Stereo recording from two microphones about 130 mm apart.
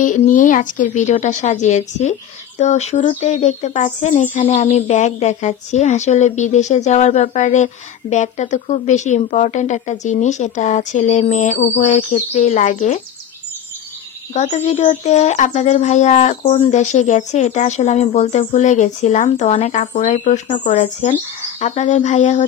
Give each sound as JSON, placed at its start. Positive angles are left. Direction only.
{"t": 0.0, "sound": "speech", "side_deg": 90}
{"t": 14.3, "sound": "speech", "side_deg": 65}